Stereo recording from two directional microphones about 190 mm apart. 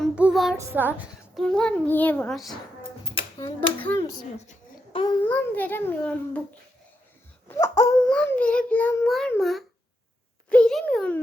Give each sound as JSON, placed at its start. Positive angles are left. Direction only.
{"t": 0.0, "sound": "child singing", "side_deg": -5}
{"t": 0.5, "sound": "child singing", "side_deg": -15}
{"t": 1.4, "sound": "a child's voice", "side_deg": 5}
{"t": 4.2, "sound": "a sound", "side_deg": 35}
{"t": 5.2, "sound": "a child's voice", "side_deg": 10}
{"t": 7.4, "sound": "a sound", "side_deg": 15}
{"t": 8.0, "sound": "a child's voice", "side_deg": 5}
{"t": 9.0, "sound": "a child's voice", "side_deg": 0}